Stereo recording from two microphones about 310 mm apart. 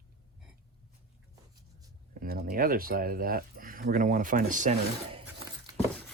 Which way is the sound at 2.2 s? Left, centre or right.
Right.